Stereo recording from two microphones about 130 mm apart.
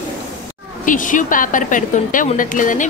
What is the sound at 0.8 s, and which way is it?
A woman's voice, 90° left.